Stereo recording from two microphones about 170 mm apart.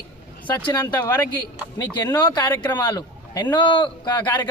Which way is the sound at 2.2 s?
25° left (ahead or behind).